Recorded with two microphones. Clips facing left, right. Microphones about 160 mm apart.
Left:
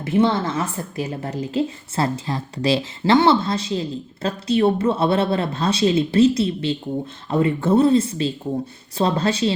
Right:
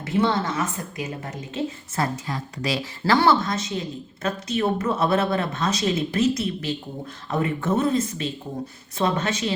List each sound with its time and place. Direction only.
0.0 s a woman's voice: 25° left (ahead or behind)